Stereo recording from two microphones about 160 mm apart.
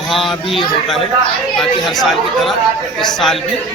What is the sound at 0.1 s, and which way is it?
Speech, centre (ahead or behind).